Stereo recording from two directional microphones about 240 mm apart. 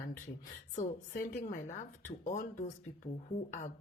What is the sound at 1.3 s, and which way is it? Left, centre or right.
Speech, left.